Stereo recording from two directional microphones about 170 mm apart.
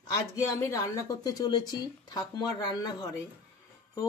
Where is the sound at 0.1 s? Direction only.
15° left (ahead or behind).